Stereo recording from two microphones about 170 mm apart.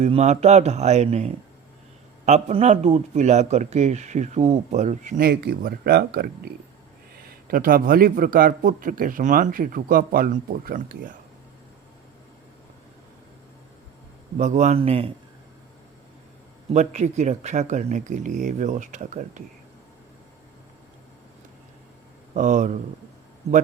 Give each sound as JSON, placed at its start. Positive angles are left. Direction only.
{"t": 0.0, "sound": "a man's voice", "side_deg": -40}
{"t": 14.3, "sound": "speech", "side_deg": -45}
{"t": 16.7, "sound": "speech", "side_deg": -45}
{"t": 22.4, "sound": "speech", "side_deg": -50}